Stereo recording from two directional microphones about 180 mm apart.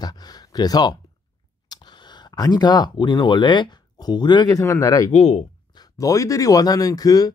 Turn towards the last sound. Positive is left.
turn(degrees=20)  # may be behind; listen again after turning